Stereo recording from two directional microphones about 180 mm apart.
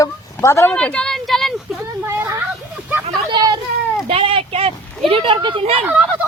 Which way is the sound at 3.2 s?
25° right (ahead or behind).